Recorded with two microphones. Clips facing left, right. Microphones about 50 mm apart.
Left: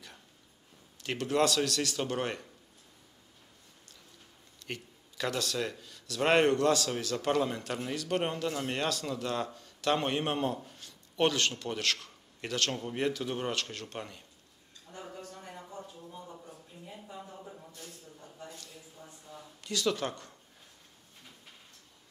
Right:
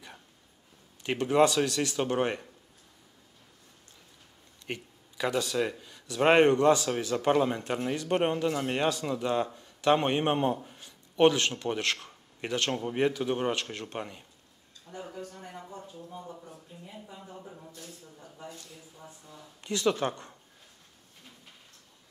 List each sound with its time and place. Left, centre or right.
1.0 s speech: centre
4.6 s speech: centre
14.9 s a sound: centre
19.6 s speech: right